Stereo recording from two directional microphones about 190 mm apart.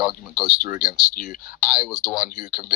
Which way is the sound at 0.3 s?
45° left (ahead or behind).